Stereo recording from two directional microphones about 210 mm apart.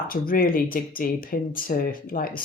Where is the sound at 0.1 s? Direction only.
45° left (ahead or behind).